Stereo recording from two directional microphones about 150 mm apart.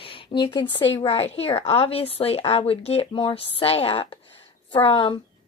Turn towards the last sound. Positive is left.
turn(degrees=35)  # may be behind; listen again after turning